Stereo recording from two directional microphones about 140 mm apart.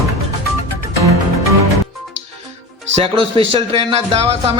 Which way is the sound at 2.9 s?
40° right (ahead or behind).